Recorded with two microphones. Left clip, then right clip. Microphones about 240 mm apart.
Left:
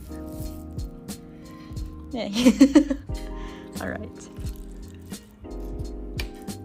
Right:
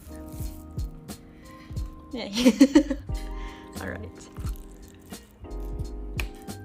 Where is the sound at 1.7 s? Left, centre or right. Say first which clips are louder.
Left 3 dB; centre.